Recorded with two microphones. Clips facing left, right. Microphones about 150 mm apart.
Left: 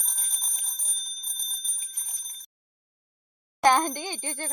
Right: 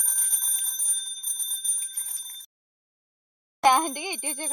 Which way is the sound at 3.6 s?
10° right (ahead or behind).